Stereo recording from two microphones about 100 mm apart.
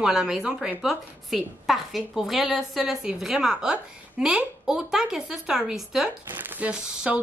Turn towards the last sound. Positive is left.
turn(degrees=-15)  # may be behind; listen again after turning